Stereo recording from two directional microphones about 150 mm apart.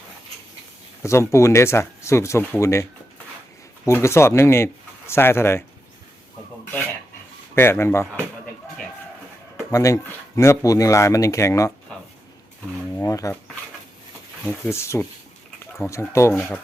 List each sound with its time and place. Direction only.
1.0 s speech: 20° left (ahead or behind)
3.8 s speech: 20° left (ahead or behind)
7.5 s speech: 15° left (ahead or behind)
9.7 s speech: 20° left (ahead or behind)
13.0 s dishes: 20° left (ahead or behind)
14.7 s speech: 15° left (ahead or behind)